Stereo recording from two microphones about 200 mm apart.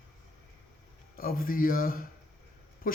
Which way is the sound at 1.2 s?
45° left (ahead or behind).